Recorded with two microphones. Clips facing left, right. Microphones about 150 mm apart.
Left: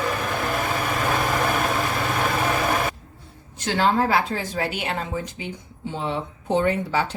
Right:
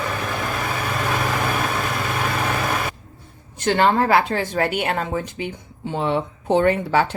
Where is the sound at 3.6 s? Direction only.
65° right (ahead or behind).